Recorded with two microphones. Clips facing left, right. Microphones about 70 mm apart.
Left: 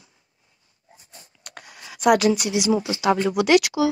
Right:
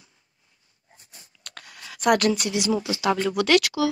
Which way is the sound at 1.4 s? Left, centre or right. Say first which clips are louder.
Left 1 dB; centre.